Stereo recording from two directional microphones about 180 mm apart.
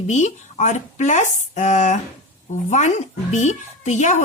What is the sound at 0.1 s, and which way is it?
A woman's voice, 40° left (ahead or behind).